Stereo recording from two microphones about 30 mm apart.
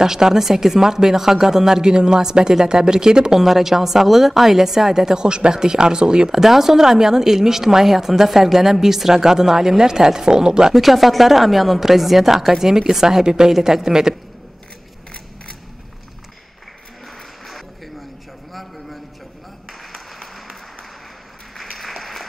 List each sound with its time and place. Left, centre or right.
0.0 s a woman's voice: centre
1.8 s speech: right
3.3 s a woman's voice: centre; by 6.3 s right
6.3 s a woman's voice: centre
10.7 s a woman's voice: centre
18.5 s a sound: centre
19.9 s applause: centre
21.7 s applause: centre